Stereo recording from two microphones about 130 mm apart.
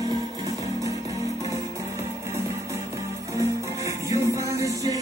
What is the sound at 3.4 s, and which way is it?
Music, 25° right (ahead or behind).